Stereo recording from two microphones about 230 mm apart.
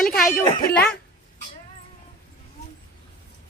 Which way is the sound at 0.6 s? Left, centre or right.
Left.